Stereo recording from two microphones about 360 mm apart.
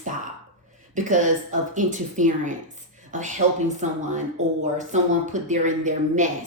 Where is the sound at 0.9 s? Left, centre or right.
Right.